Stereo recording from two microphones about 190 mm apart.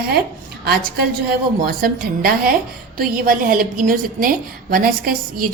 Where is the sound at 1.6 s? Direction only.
50° right (ahead or behind).